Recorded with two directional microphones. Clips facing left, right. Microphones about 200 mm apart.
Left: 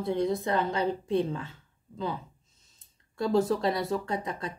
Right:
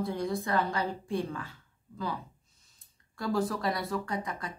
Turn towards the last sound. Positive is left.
turn(degrees=25)  # may be behind; listen again after turning